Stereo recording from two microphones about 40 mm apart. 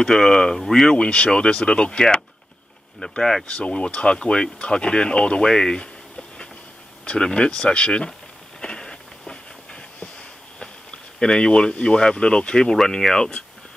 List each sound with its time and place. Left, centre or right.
0.0 s speech: centre
0.9 s speech: left
3.0 s speech: centre
3.4 s speech: left
8.5 s train: left
10.6 s speech: centre